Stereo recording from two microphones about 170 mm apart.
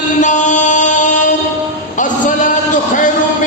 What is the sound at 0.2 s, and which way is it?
Music, 45° left (ahead or behind).